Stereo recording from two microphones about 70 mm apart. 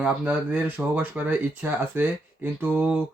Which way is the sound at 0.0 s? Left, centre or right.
Centre.